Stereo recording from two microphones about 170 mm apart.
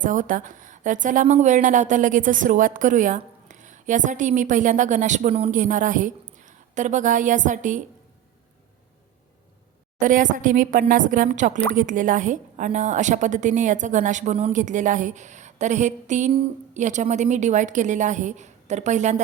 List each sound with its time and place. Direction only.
0.0 s a woman's voice: 50° right (ahead or behind)
10.0 s a woman's voice: 50° right (ahead or behind)